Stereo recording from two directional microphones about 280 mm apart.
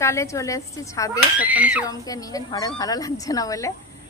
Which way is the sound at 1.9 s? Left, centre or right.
Centre.